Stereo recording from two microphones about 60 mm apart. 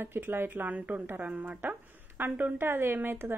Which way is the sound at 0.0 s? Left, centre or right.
Right.